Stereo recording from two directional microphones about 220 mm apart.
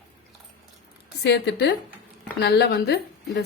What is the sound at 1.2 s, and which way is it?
A woman's voice, 50° left (ahead or behind).